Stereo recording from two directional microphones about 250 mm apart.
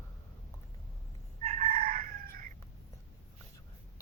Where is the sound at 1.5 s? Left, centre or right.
Right.